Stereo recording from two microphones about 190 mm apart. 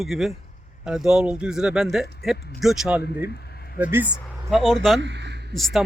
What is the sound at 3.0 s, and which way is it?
Speech, 55° left (ahead or behind).